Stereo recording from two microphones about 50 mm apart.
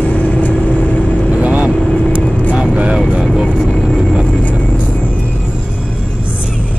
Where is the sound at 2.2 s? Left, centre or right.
Left.